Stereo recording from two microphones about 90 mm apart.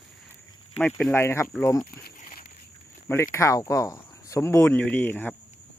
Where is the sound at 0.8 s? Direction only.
10° left (ahead or behind).